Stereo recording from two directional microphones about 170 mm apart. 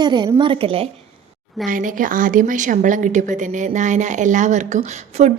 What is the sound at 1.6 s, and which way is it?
A woman's voice, 55° right (ahead or behind).